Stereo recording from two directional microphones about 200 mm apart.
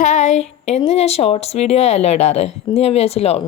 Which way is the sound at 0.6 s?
35° left (ahead or behind).